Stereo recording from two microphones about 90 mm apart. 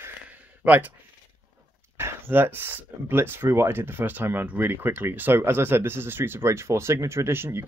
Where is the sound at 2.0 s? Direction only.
25° right (ahead or behind).